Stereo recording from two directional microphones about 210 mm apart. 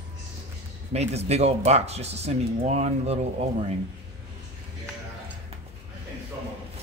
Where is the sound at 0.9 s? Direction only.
30° right (ahead or behind).